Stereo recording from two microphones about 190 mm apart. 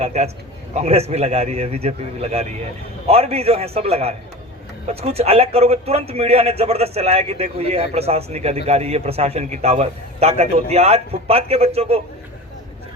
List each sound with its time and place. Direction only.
0.0 s a man's voice: 35° right (ahead or behind)